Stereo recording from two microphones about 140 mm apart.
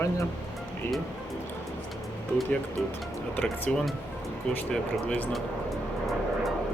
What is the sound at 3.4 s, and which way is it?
Speech, 5° left (ahead or behind).